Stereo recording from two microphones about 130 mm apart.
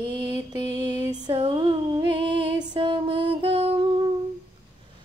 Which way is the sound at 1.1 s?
35° right (ahead or behind).